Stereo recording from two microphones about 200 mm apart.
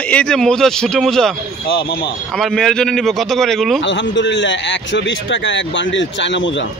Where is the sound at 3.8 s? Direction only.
60° left (ahead or behind).